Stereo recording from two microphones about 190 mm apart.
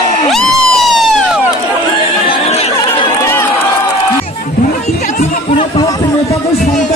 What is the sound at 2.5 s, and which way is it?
Chatter, 35° left (ahead or behind).